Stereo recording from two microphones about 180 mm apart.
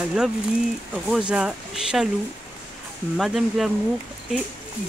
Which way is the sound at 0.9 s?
5° right (ahead or behind).